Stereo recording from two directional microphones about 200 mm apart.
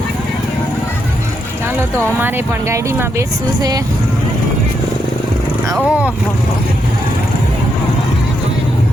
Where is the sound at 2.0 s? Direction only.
10° right (ahead or behind).